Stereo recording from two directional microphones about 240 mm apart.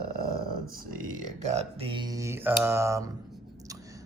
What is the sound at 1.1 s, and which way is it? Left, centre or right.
Speech, right.